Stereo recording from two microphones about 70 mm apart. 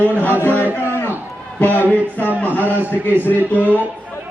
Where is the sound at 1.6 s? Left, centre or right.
Left.